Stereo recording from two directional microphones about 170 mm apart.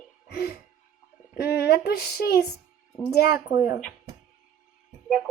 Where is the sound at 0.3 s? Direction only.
65° left (ahead or behind).